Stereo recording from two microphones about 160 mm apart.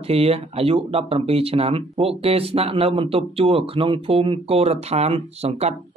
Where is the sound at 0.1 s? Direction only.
40° right (ahead or behind).